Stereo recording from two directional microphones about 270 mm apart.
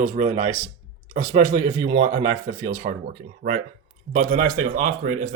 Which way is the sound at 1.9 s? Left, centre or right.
Right.